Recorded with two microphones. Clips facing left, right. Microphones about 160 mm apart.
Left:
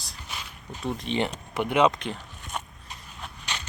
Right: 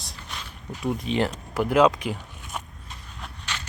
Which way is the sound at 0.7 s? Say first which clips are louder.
Right 3 dB; 10° right (ahead or behind).